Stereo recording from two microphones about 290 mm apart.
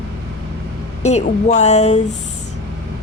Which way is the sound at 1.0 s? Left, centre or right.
Left.